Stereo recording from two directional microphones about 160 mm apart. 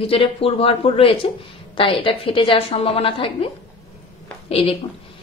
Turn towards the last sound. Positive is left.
turn(degrees=35)  # may be behind; listen again after turning